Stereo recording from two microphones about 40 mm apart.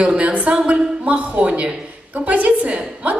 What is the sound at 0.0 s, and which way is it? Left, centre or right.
A woman's voice, right.